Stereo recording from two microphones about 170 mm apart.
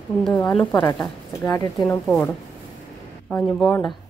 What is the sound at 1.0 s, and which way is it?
Speech, 20° left (ahead or behind).